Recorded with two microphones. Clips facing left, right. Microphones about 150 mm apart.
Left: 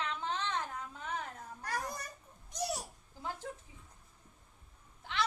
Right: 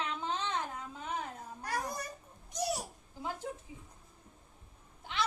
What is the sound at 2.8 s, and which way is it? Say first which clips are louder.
Babbling: right 3 dB; 15° right (ahead or behind).